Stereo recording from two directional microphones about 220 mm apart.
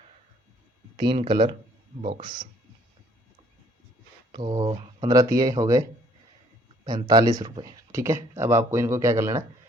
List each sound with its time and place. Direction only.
0.9 s speech: 25° right (ahead or behind)
4.3 s speech: 20° right (ahead or behind)
6.8 s speech: 15° right (ahead or behind)
7.9 s speech: 10° right (ahead or behind)